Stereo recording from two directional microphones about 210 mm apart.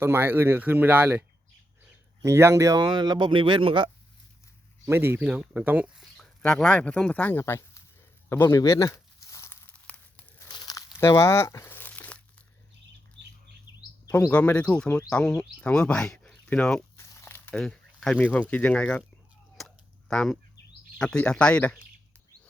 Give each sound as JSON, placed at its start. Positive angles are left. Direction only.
{"t": 0.0, "sound": "speech", "side_deg": -10}
{"t": 2.2, "sound": "speech", "side_deg": -10}
{"t": 4.9, "sound": "speech", "side_deg": -10}
{"t": 8.3, "sound": "crumpling", "side_deg": 10}
{"t": 13.2, "sound": "bird", "side_deg": -60}
{"t": 14.1, "sound": "speech", "side_deg": 5}
{"t": 17.0, "sound": "a sound", "side_deg": 10}
{"t": 21.0, "sound": "speech", "side_deg": 5}